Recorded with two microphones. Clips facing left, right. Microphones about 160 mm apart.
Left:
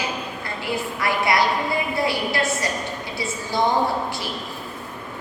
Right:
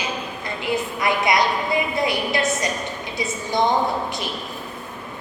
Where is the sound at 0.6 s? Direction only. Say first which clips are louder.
Right 3 dB; 20° right (ahead or behind).